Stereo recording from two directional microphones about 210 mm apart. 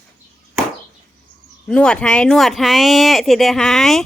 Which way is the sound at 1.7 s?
5° left (ahead or behind).